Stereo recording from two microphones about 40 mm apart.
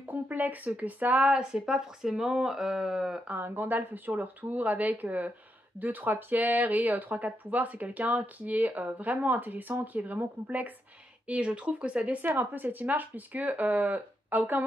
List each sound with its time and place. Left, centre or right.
0.0 s a sound: right
0.7 s speech: right
1.3 s speech: right
1.7 s speech: centre
3.3 s speech: right
11.2 s speech: right
12.2 s speech: right